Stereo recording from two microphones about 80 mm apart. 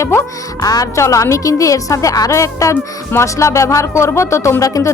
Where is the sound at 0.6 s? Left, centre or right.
Left.